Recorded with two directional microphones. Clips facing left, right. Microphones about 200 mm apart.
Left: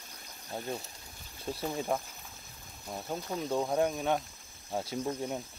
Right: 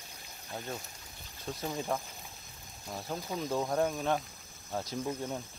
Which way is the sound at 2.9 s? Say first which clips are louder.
Left 1 dB; centre (ahead or behind).